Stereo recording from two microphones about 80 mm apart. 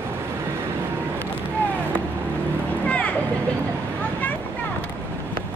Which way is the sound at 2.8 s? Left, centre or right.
Centre.